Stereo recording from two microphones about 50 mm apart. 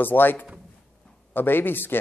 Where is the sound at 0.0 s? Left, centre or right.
Left.